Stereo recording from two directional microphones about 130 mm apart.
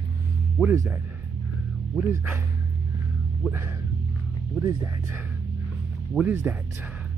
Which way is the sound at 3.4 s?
20° right (ahead or behind).